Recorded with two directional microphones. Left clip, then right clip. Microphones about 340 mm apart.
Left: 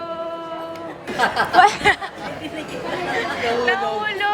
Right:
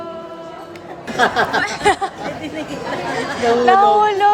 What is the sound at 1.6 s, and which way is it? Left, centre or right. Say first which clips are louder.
Speech: left 1 dB; centre.